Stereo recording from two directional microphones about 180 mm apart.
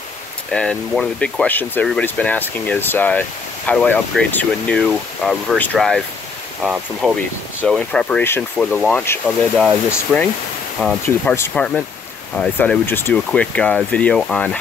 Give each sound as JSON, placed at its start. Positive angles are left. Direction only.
{"t": 0.5, "sound": "speech", "side_deg": 5}